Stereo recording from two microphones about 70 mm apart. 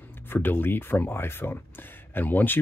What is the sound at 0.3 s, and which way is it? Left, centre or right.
Speech, left.